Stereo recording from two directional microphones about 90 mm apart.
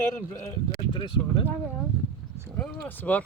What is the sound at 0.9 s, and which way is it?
Speech, 60° left (ahead or behind).